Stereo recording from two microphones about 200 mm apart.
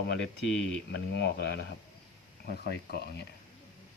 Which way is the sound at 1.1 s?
60° left (ahead or behind).